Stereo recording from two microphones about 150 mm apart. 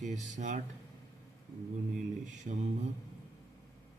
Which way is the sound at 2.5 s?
60° right (ahead or behind).